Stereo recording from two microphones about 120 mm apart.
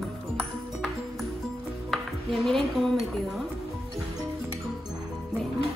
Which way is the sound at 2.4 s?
Centre (ahead or behind).